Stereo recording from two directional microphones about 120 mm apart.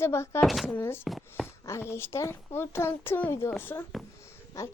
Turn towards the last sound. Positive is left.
turn(degrees=25)  # may be behind; listen again after turning